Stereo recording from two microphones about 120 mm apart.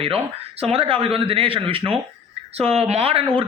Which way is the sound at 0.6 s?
55° right (ahead or behind).